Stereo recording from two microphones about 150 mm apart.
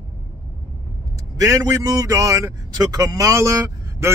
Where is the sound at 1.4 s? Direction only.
20° right (ahead or behind).